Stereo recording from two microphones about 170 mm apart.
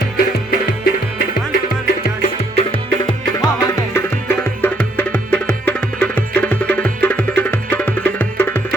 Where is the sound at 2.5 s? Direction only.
30° left (ahead or behind).